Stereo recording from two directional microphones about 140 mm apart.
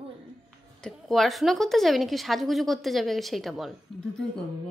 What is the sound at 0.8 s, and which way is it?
A woman's voice, centre (ahead or behind).